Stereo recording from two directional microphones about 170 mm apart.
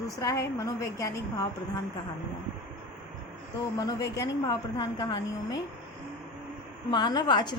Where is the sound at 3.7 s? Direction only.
20° left (ahead or behind).